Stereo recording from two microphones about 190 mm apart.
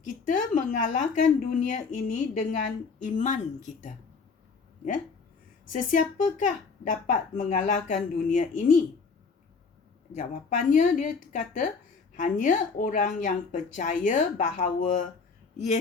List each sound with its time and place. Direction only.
0.1 s speech: 45° left (ahead or behind)
5.6 s speech: 45° left (ahead or behind)
10.1 s speech: 40° left (ahead or behind)